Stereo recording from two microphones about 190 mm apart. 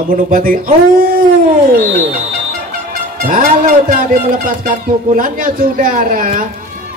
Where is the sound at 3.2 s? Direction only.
45° right (ahead or behind).